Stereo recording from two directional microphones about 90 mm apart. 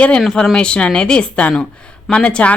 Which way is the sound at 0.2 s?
Centre (ahead or behind).